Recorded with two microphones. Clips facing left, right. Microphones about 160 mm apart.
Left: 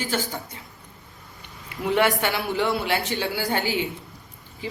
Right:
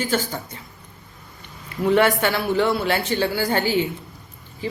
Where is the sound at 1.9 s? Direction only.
15° left (ahead or behind).